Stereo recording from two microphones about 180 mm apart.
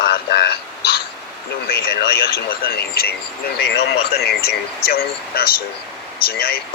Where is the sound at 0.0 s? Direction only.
60° left (ahead or behind).